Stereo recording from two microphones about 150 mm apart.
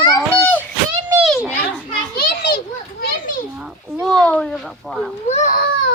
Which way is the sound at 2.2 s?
75° left (ahead or behind).